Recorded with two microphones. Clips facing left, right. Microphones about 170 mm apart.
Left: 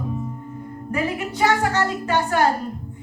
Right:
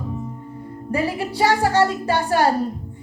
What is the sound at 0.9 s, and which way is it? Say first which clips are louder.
Music: right 2 dB; 30° right (ahead or behind).